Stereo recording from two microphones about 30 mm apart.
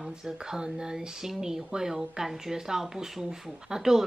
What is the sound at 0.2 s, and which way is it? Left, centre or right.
Speech, centre.